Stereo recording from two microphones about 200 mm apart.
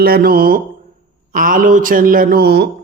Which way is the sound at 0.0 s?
50° right (ahead or behind).